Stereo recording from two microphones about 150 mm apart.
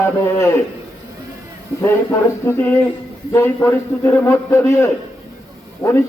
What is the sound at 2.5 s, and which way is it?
A man's voice, 15° left (ahead or behind).